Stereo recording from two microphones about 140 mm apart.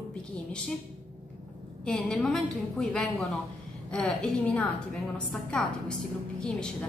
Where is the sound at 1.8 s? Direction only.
5° left (ahead or behind).